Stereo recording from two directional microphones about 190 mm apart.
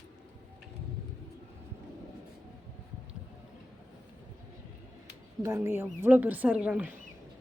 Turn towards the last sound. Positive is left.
turn(degrees=-5)  # may be behind; listen again after turning